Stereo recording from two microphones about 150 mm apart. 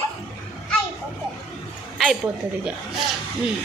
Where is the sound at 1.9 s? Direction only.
Centre (ahead or behind).